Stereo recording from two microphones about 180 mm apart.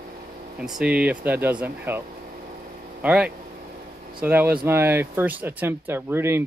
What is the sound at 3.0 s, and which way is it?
Speech, 5° right (ahead or behind).